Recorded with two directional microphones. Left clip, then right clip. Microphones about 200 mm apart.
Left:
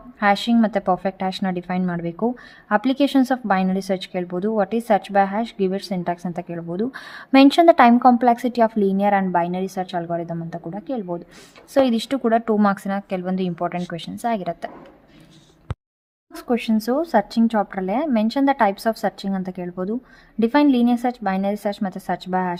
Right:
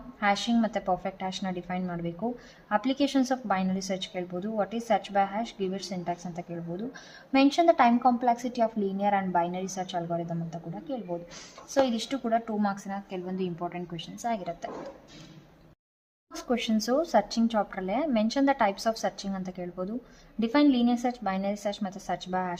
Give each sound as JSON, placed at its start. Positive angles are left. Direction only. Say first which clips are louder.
{"t": 0.2, "sound": "a woman's voice", "louder": "left 8 dB", "side_deg": 35}
{"t": 14.2, "sound": "a woman's voice", "louder": "left 8 dB", "side_deg": 35}
{"t": 16.3, "sound": "speech", "louder": "left 7 dB", "side_deg": 25}